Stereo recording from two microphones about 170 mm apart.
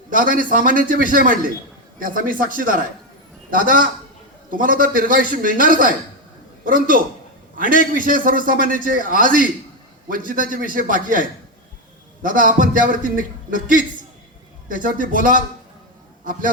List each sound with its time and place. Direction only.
0.3 s a man's voice: 55° right (ahead or behind)